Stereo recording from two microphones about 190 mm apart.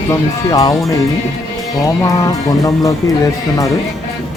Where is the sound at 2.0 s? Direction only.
15° left (ahead or behind).